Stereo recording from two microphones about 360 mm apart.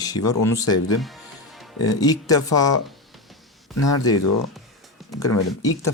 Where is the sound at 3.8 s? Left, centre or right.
Left.